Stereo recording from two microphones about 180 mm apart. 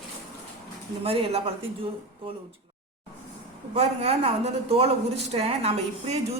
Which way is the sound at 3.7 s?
35° right (ahead or behind).